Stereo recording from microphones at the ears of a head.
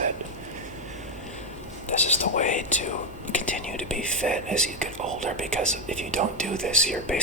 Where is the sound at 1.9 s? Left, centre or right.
Left.